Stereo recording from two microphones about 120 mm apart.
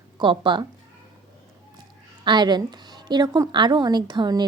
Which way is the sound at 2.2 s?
40° right (ahead or behind).